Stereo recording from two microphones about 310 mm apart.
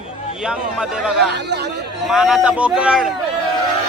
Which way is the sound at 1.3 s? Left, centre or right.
Right.